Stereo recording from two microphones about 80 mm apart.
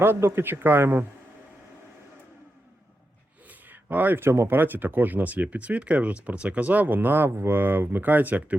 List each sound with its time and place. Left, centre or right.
0.0 s speech: right
3.5 s speech: right